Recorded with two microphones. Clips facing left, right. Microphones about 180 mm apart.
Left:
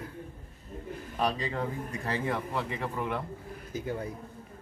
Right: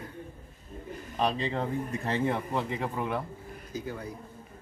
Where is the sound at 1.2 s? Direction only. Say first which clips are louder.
Right 2 dB; 20° right (ahead or behind).